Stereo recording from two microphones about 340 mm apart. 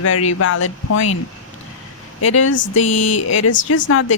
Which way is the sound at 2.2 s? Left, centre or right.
Left.